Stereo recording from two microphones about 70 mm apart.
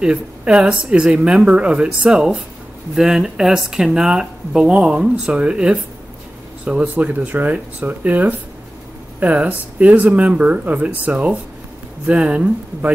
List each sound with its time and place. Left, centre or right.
0.0 s speech: centre
6.8 s speech: right